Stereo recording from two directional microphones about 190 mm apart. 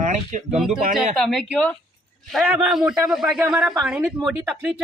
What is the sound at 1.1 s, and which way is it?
A woman's voice, centre (ahead or behind).